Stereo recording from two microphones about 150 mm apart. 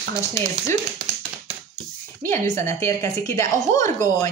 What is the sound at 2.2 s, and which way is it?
A woman's voice, 15° left (ahead or behind).